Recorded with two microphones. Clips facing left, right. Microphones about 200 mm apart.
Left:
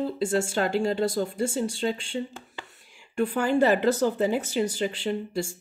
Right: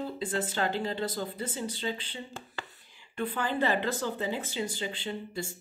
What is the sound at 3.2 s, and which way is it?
Speech, 45° left (ahead or behind).